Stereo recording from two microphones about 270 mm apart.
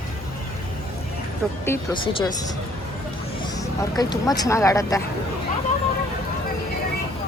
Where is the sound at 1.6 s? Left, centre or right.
Centre.